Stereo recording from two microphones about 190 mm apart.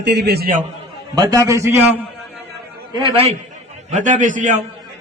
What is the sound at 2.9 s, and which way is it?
Speech, 25° right (ahead or behind).